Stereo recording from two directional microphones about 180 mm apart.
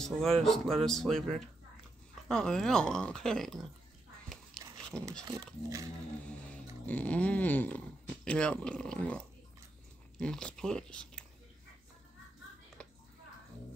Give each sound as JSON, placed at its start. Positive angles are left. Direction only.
{"t": 0.0, "sound": "speech", "side_deg": 0}
{"t": 4.6, "sound": "dog", "side_deg": 5}
{"t": 4.9, "sound": "speech", "side_deg": 5}
{"t": 5.3, "sound": "speech", "side_deg": -15}
{"t": 6.9, "sound": "a sound", "side_deg": 10}
{"t": 8.3, "sound": "speech", "side_deg": 5}
{"t": 12.8, "sound": "a sound", "side_deg": 5}